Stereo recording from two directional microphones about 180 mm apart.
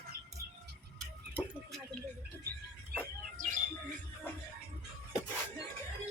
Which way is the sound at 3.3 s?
45° right (ahead or behind).